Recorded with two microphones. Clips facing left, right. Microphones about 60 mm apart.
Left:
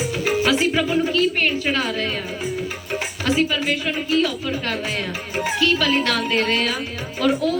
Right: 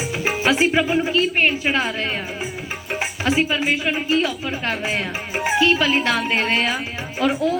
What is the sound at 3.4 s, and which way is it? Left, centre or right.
Speech, right.